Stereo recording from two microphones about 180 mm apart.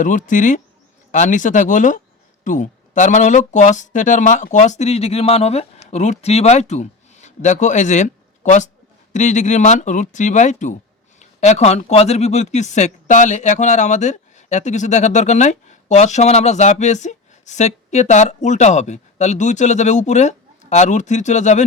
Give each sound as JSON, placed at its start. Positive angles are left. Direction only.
{"t": 0.0, "sound": "speech", "side_deg": 45}